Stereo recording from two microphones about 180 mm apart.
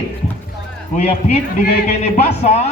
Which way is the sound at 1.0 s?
35° left (ahead or behind).